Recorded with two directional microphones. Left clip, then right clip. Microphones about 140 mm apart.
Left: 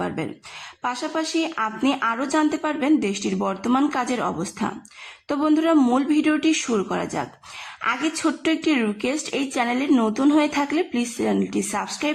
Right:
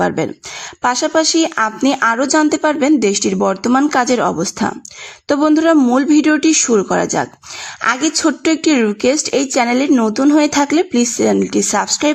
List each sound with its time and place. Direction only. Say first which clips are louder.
1.0 s speech: right 10 dB; 50° right (ahead or behind)
2.2 s speech: right 9 dB; 40° right (ahead or behind)
8.1 s speech: right 8 dB; 35° right (ahead or behind)